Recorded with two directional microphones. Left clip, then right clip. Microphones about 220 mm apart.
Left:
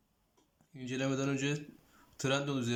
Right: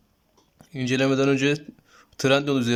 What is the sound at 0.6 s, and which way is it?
Speech, 40° right (ahead or behind).